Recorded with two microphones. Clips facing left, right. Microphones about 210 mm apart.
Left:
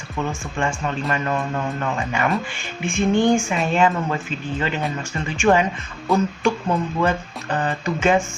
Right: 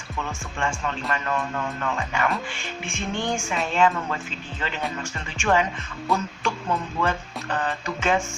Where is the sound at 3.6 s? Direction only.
15° left (ahead or behind).